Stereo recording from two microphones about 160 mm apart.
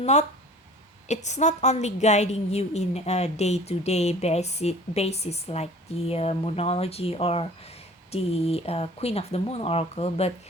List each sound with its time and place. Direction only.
0.0 s a woman's voice: 45° left (ahead or behind)